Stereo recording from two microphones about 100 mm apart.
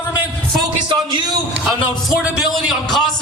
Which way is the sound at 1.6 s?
Centre (ahead or behind).